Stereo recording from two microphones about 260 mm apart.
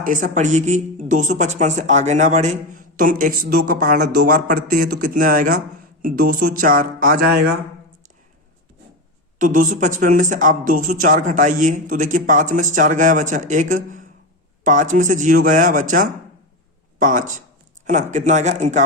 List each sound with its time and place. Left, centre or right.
0.0 s speech: right
9.4 s speech: right